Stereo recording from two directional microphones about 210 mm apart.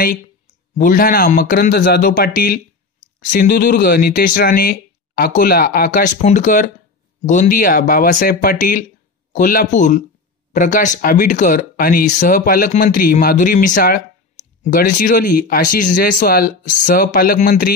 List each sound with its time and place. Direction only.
0.7 s speech: 40° left (ahead or behind)